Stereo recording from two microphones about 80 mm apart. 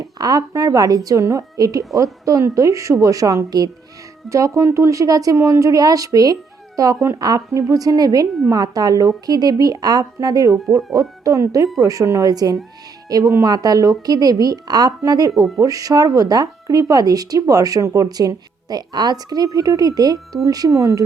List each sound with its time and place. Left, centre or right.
0.0 s speech: right
4.3 s a woman's voice: right